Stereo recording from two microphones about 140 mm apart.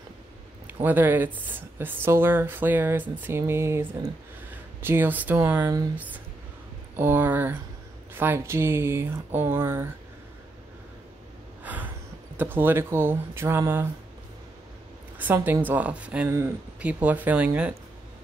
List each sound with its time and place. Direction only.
0.8 s speech: 15° right (ahead or behind)
11.6 s a sound: 10° right (ahead or behind)
12.4 s speech: 15° right (ahead or behind)
15.1 s speech: 15° right (ahead or behind)
16.3 s speech: 20° right (ahead or behind)